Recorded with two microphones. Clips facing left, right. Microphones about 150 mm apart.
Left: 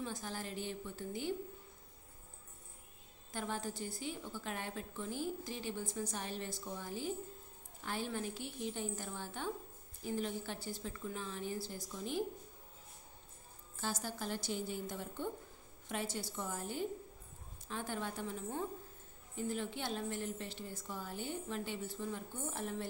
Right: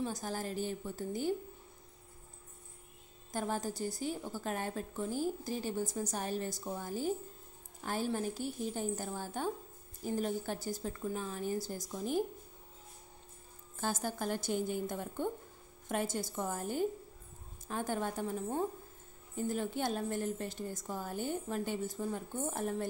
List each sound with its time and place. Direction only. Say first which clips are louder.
0.0 s a woman's voice: right 5 dB; 40° right (ahead or behind)
3.3 s a woman's voice: right 5 dB; 40° right (ahead or behind)
13.7 s a woman's voice: right 5 dB; 50° right (ahead or behind)